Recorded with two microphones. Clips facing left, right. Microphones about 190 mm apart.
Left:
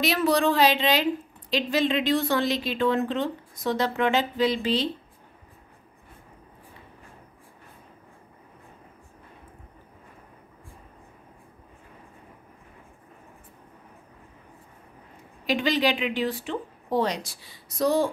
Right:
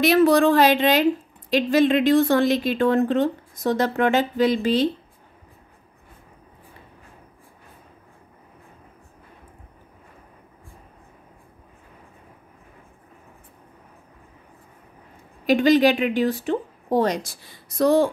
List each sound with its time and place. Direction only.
0.0 s speech: 50° right (ahead or behind)
15.4 s speech: 45° right (ahead or behind)